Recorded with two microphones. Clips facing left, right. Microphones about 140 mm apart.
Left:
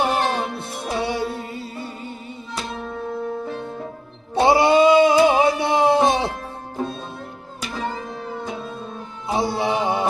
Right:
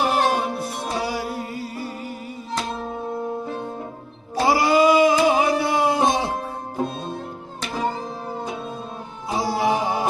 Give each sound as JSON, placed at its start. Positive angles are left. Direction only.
{"t": 0.0, "sound": "music", "side_deg": 25}
{"t": 4.4, "sound": "a sound", "side_deg": 25}
{"t": 9.4, "sound": "music", "side_deg": 25}